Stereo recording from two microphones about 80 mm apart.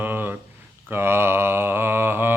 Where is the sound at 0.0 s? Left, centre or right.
Right.